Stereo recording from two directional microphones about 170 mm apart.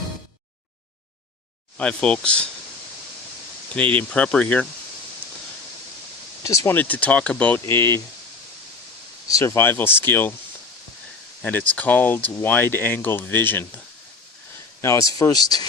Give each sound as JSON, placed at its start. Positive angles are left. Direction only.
{"t": 1.8, "sound": "speech", "side_deg": 5}
{"t": 3.8, "sound": "speech", "side_deg": 5}
{"t": 6.4, "sound": "speech", "side_deg": 20}
{"t": 9.4, "sound": "speech", "side_deg": 15}
{"t": 11.7, "sound": "speech", "side_deg": 10}
{"t": 14.8, "sound": "speech", "side_deg": 15}